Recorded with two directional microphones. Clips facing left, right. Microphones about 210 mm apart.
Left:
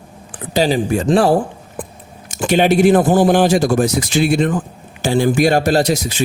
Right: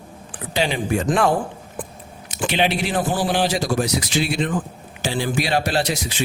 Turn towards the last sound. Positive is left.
turn(degrees=40)  # may be behind; listen again after turning